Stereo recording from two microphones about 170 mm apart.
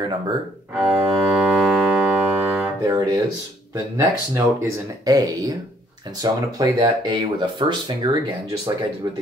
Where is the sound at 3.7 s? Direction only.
20° right (ahead or behind).